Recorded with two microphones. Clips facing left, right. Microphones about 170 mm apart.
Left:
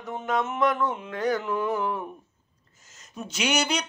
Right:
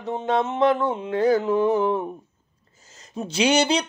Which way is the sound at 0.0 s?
30° right (ahead or behind).